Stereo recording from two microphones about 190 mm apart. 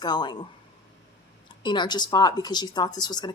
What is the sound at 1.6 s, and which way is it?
Speech, 25° left (ahead or behind).